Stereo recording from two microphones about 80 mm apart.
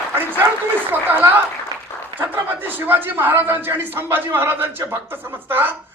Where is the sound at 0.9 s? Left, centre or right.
Right.